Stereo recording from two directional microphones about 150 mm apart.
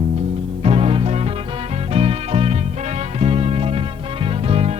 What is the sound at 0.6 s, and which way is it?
Music, 40° right (ahead or behind).